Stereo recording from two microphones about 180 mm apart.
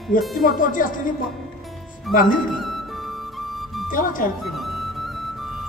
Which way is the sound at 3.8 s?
50° left (ahead or behind).